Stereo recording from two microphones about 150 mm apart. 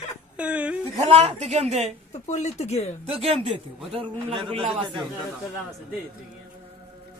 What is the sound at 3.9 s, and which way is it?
A man's voice, 35° right (ahead or behind).